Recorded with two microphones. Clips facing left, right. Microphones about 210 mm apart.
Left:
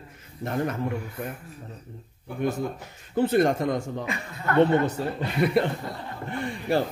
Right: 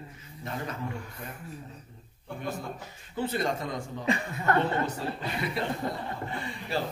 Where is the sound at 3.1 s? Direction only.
55° left (ahead or behind).